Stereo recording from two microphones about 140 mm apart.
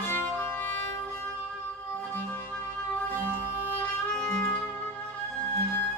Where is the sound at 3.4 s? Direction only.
15° left (ahead or behind).